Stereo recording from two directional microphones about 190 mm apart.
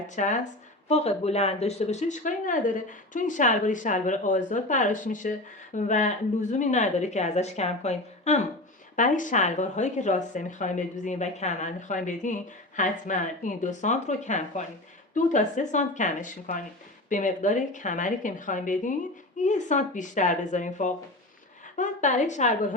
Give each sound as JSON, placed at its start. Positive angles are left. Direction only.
{"t": 0.2, "sound": "a woman's voice", "side_deg": 40}